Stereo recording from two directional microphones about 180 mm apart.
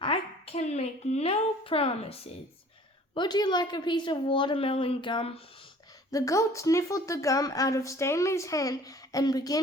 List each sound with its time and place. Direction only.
0.0 s a woman's voice: 30° left (ahead or behind)
6.1 s speech: 20° left (ahead or behind)